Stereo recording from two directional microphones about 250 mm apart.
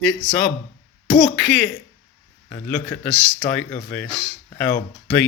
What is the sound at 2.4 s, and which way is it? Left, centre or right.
Speech, centre.